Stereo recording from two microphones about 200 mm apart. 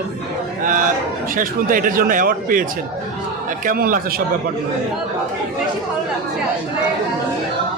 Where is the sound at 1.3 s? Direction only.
45° right (ahead or behind).